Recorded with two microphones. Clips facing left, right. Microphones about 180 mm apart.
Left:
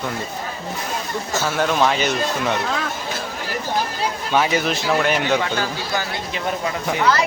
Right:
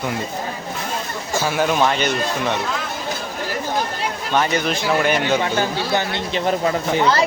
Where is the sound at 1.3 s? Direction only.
10° right (ahead or behind).